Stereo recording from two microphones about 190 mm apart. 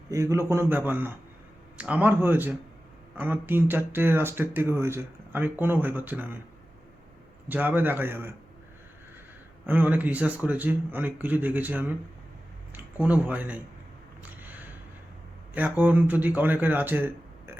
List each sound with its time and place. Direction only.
0.1 s speech: 15° right (ahead or behind)
7.4 s speech: 10° right (ahead or behind)
9.6 s speech: 10° right (ahead or behind)
15.5 s speech: 10° right (ahead or behind)